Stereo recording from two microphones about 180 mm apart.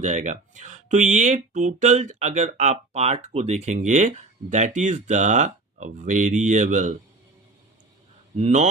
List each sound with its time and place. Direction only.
0.0 s speech: 40° right (ahead or behind)
8.4 s speech: 40° right (ahead or behind)